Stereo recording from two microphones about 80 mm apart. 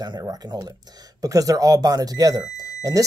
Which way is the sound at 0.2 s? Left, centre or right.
Right.